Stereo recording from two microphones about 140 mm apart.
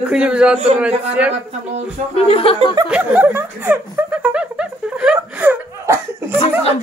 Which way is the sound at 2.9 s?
10° right (ahead or behind).